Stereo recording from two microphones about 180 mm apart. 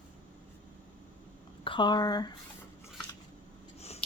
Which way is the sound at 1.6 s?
25° left (ahead or behind).